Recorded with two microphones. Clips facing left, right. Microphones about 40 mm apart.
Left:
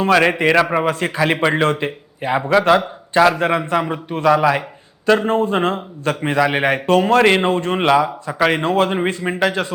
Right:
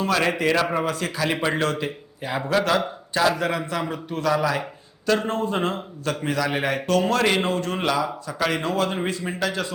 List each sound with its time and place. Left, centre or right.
0.0 s a man's voice: left